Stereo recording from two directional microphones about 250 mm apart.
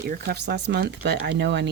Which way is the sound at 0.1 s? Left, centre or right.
Right.